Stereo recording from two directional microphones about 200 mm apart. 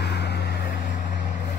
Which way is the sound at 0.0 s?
55° left (ahead or behind).